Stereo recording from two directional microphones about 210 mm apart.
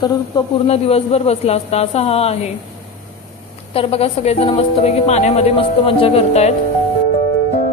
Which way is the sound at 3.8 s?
30° left (ahead or behind).